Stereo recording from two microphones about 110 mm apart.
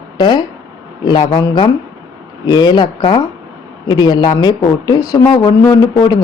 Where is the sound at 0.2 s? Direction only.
40° left (ahead or behind).